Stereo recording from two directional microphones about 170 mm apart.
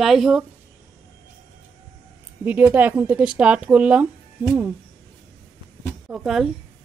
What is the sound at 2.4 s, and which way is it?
Speech, 10° right (ahead or behind).